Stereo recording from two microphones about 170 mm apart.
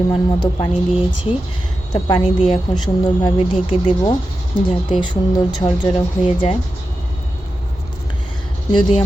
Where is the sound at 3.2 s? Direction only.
30° left (ahead or behind).